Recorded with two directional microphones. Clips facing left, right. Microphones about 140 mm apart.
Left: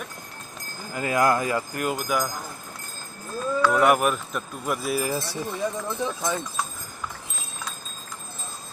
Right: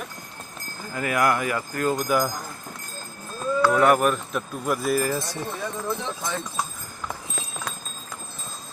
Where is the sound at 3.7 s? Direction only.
5° left (ahead or behind).